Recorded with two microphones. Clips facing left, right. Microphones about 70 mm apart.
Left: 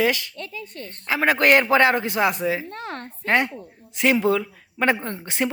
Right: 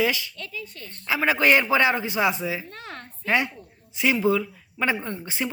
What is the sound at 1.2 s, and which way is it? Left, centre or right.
A woman's voice, left.